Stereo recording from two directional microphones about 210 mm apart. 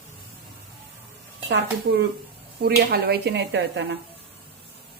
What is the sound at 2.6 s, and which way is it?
Speech, 50° right (ahead or behind).